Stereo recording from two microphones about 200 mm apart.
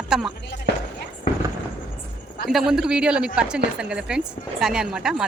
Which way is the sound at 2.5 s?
Centre (ahead or behind).